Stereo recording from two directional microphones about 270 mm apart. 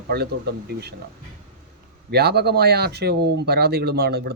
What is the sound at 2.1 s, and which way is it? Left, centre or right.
Speech, right.